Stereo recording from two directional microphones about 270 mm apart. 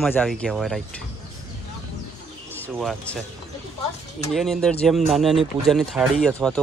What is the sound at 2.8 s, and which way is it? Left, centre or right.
Speech, centre.